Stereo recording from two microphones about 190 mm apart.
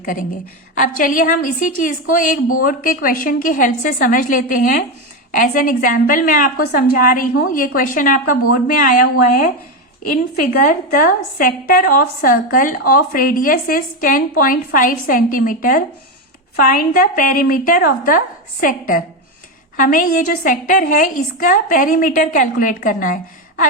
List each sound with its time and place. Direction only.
0.0 s a woman's voice: 45° left (ahead or behind)
10.0 s a woman's voice: 45° left (ahead or behind)